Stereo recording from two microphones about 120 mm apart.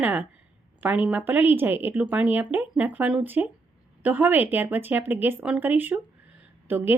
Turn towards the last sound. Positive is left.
turn(degrees=-15)  # may be behind; listen again after turning